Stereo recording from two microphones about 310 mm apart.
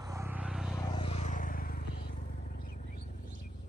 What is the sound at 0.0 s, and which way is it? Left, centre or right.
Vehicle, centre.